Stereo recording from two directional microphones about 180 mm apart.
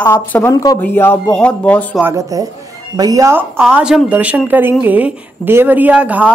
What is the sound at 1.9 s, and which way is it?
A woman's voice, 15° right (ahead or behind).